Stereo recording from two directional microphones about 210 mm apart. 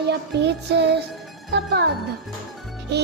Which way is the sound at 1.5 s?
55° right (ahead or behind).